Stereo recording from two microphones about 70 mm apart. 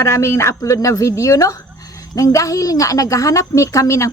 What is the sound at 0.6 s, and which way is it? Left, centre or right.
Speech, left.